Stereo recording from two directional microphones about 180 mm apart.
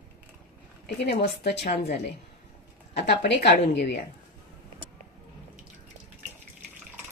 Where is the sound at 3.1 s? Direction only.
65° left (ahead or behind).